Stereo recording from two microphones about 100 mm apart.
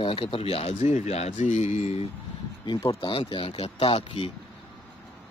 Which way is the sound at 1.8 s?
90° left.